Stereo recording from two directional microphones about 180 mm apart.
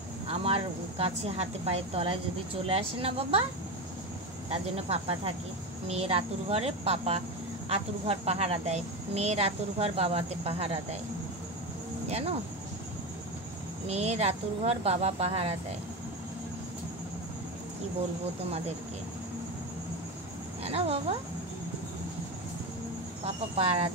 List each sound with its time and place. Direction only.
0.3 s speech: 30° right (ahead or behind)
4.5 s speech: 35° right (ahead or behind)
12.1 s speech: 35° right (ahead or behind)
13.8 s speech: 35° right (ahead or behind)
20.6 s speech: 35° right (ahead or behind)
23.2 s speech: 35° right (ahead or behind)